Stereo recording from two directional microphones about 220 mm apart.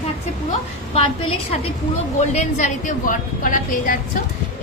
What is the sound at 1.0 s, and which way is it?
A woman's voice, 30° left (ahead or behind).